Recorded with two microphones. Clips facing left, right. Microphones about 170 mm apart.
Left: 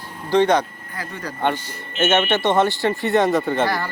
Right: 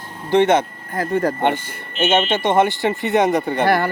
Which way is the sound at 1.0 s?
50° right (ahead or behind).